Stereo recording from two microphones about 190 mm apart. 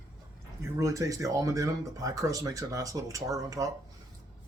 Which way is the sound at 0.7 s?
15° right (ahead or behind).